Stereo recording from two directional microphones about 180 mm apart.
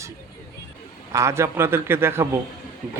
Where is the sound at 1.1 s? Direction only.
15° right (ahead or behind).